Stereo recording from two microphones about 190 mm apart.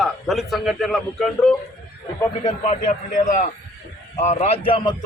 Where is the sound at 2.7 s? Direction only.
40° left (ahead or behind).